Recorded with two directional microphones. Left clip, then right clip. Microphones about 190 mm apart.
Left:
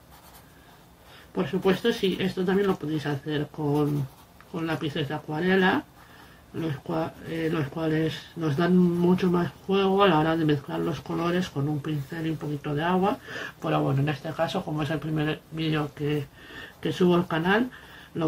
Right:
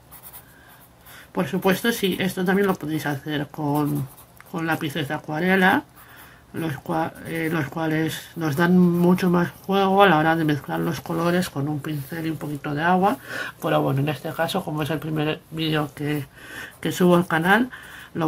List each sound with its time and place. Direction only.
1.3 s speech: 30° right (ahead or behind)